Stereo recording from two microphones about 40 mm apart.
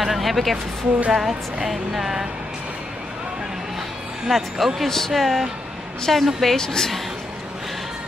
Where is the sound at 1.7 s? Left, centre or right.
Centre.